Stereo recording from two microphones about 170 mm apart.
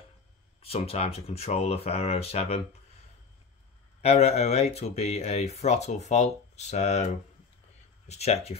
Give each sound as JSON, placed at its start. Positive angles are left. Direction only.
{"t": 0.6, "sound": "speech", "side_deg": 35}
{"t": 4.0, "sound": "speech", "side_deg": 40}
{"t": 8.1, "sound": "speech", "side_deg": 40}